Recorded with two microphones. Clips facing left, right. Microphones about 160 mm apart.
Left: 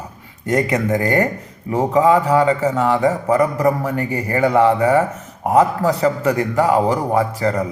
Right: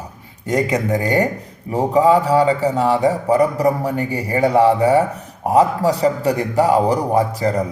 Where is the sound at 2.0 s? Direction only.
35° right (ahead or behind).